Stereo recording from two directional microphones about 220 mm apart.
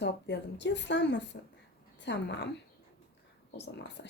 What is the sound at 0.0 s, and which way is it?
Speech, 50° left (ahead or behind).